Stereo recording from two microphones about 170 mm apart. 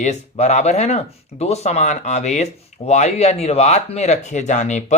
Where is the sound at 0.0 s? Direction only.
45° left (ahead or behind).